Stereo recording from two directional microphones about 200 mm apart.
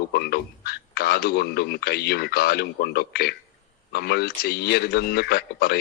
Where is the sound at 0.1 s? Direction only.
50° left (ahead or behind).